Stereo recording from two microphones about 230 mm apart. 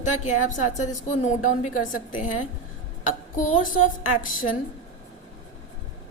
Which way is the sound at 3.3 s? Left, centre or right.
Left.